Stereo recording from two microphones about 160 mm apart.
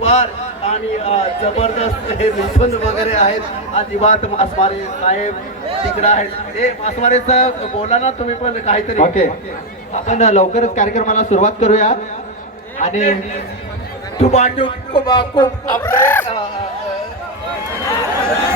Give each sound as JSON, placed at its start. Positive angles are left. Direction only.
{"t": 0.0, "sound": "a man's voice", "side_deg": 40}
{"t": 14.2, "sound": "a man's voice", "side_deg": 45}
{"t": 15.8, "sound": "speech", "side_deg": 15}